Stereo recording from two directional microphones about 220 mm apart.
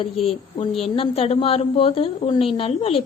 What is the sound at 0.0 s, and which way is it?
A woman's voice, 25° left (ahead or behind).